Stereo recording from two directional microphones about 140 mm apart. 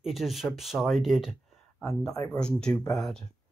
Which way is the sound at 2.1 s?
25° left (ahead or behind).